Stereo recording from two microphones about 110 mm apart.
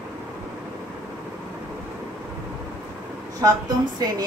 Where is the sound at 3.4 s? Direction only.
35° right (ahead or behind).